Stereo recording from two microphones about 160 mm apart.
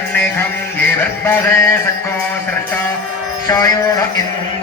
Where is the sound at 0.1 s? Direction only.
10° left (ahead or behind).